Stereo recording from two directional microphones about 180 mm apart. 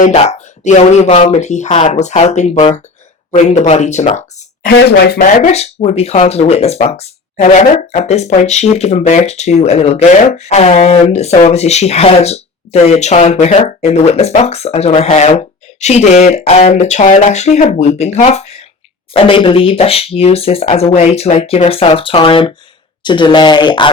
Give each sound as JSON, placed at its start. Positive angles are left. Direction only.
{"t": 0.0, "sound": "speech", "side_deg": 40}
{"t": 4.6, "sound": "speech", "side_deg": 65}
{"t": 5.2, "sound": "speech", "side_deg": 40}